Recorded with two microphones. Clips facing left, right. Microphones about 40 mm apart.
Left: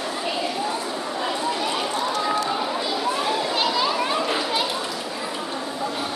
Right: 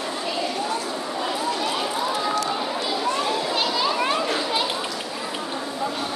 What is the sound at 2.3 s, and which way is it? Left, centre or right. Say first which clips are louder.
Children playing: left 1 dB; centre.